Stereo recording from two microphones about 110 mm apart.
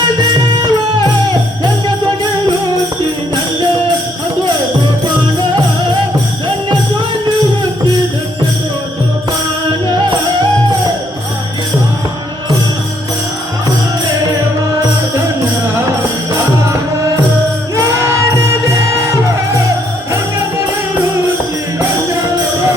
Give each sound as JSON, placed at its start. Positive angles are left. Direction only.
{"t": 0.2, "sound": "music", "side_deg": -40}
{"t": 17.7, "sound": "music", "side_deg": -25}